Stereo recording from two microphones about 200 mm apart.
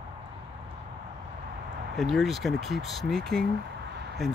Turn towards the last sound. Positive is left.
turn(degrees=0)  # may be behind; listen again after turning